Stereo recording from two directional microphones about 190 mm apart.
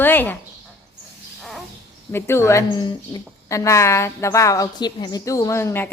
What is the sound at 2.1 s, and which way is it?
A woman's voice, 15° left (ahead or behind).